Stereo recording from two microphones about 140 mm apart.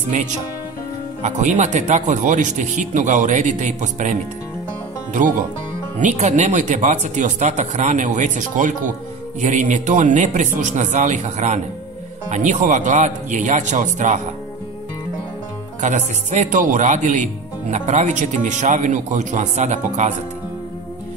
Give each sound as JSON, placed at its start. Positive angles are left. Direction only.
{"t": 1.2, "sound": "speech", "side_deg": -55}
{"t": 5.9, "sound": "speech", "side_deg": -60}
{"t": 15.8, "sound": "speech", "side_deg": -60}